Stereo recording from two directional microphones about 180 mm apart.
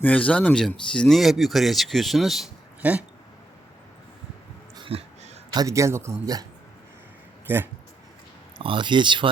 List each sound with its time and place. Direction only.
0.0 s speech: 5° left (ahead or behind)
4.8 s a sound: 35° right (ahead or behind)
5.5 s a man's voice: 15° right (ahead or behind)
7.4 s speech: 10° right (ahead or behind)
8.5 s speech: 30° right (ahead or behind)